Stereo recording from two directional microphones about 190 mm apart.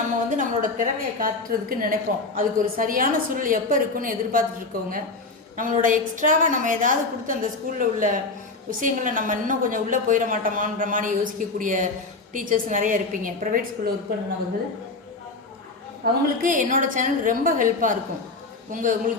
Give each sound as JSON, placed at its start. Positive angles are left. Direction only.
{"t": 0.3, "sound": "a woman's voice", "side_deg": -40}
{"t": 16.0, "sound": "a woman's voice", "side_deg": -55}